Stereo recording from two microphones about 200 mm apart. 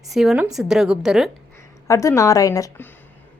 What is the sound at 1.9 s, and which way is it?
A woman's voice, 15° left (ahead or behind).